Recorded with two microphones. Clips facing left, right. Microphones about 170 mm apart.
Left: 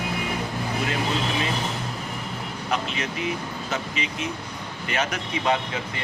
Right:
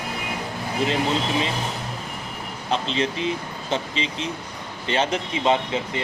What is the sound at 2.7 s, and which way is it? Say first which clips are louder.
Speech: right 5 dB; 30° right (ahead or behind).